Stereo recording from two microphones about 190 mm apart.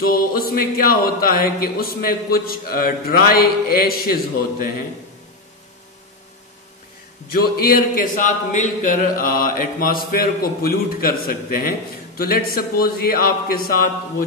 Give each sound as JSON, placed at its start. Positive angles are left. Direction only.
{"t": 0.0, "sound": "speech", "side_deg": 50}
{"t": 7.3, "sound": "speech", "side_deg": 50}